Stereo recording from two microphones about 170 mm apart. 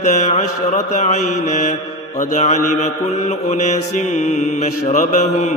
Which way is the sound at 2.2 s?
45° left (ahead or behind).